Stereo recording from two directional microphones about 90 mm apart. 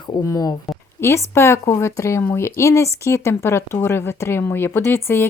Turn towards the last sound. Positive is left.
turn(degrees=25)  # may be behind; listen again after turning